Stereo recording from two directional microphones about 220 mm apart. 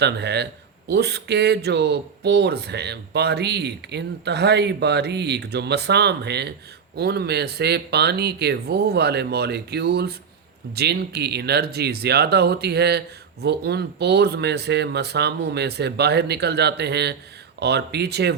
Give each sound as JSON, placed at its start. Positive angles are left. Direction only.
{"t": 0.0, "sound": "speech", "side_deg": -50}